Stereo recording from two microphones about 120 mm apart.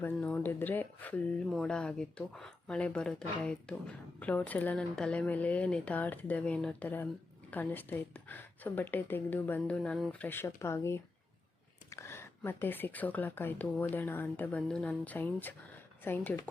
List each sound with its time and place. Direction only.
0.0 s speech: 15° left (ahead or behind)
1.5 s speech: 5° left (ahead or behind)